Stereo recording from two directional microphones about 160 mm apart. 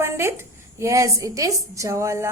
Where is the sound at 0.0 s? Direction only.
15° right (ahead or behind).